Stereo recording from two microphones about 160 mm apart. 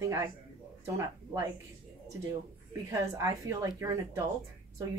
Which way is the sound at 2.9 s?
20° right (ahead or behind).